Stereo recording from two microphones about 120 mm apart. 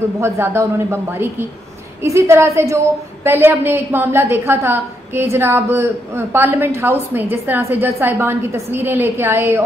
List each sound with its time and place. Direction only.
0.2 s a woman's voice: 20° right (ahead or behind)